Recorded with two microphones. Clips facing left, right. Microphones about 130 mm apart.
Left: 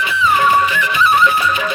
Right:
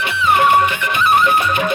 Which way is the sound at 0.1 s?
60° right (ahead or behind).